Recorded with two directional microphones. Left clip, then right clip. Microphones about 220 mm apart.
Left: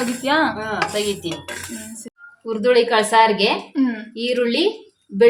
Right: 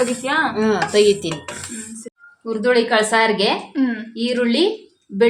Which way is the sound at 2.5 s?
10° right (ahead or behind).